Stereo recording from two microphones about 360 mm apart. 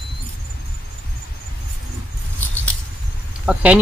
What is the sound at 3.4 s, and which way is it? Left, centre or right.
Speech, centre.